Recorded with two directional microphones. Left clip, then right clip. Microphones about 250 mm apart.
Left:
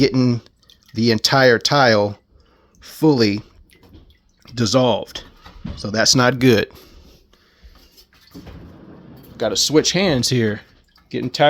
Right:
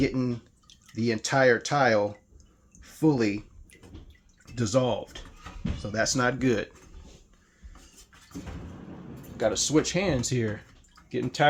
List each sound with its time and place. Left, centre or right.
0.0 s speech: left
4.5 s speech: left
9.4 s speech: left